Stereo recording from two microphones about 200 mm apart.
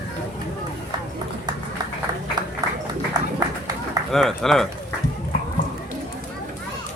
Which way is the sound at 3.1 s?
20° right (ahead or behind).